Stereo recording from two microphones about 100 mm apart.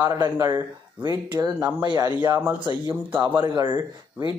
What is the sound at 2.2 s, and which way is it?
Speech, 20° right (ahead or behind).